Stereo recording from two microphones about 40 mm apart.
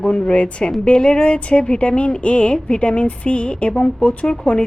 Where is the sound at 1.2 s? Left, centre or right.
Left.